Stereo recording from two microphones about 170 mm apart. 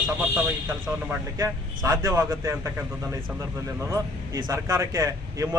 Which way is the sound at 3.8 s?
20° right (ahead or behind).